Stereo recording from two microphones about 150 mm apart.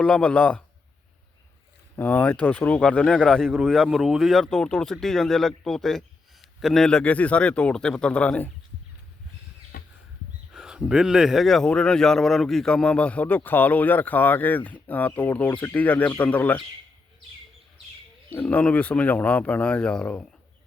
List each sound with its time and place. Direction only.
0.0 s speech: 10° left (ahead or behind)
2.0 s speech: 10° left (ahead or behind)
9.7 s a sound: 70° left (ahead or behind)
10.5 s speech: 5° right (ahead or behind)
18.3 s speech: 10° left (ahead or behind)